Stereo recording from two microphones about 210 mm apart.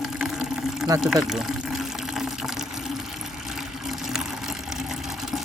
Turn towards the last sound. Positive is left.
turn(degrees=0)  # may be behind; listen again after turning